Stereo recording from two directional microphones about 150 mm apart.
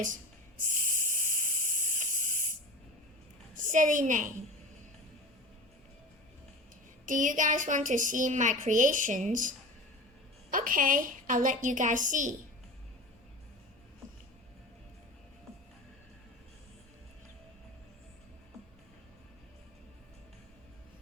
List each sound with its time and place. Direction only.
0.0 s a sound: 60° right (ahead or behind)
3.5 s a woman's voice: 60° right (ahead or behind)
7.0 s a woman's voice: 60° right (ahead or behind)
10.5 s a woman's voice: 65° right (ahead or behind)